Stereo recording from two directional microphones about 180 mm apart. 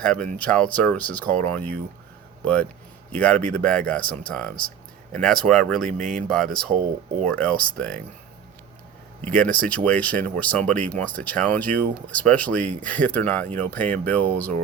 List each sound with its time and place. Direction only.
0.0 s speech: 5° left (ahead or behind)
9.2 s speech: 5° left (ahead or behind)
12.6 s speech: 45° right (ahead or behind)
12.9 s speech: 10° left (ahead or behind)